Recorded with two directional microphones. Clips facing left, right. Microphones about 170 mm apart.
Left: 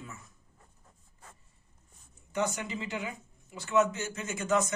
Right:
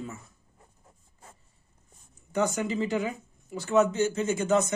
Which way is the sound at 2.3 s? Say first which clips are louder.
Right 6 dB; 40° right (ahead or behind).